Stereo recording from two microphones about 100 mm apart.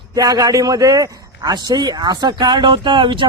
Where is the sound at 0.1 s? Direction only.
40° right (ahead or behind).